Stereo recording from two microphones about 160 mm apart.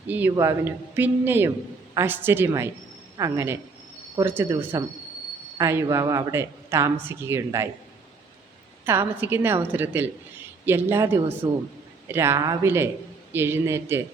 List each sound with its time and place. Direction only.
0.1 s speech: 10° right (ahead or behind)
8.9 s speech: 15° right (ahead or behind)